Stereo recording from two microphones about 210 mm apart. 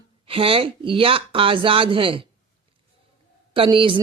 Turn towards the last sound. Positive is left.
turn(degrees=-25)  # may be behind; listen again after turning